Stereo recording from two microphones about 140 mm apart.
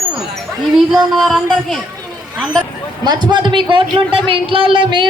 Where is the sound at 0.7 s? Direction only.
Centre (ahead or behind).